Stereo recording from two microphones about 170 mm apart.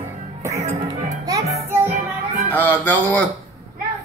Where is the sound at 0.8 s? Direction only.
20° right (ahead or behind).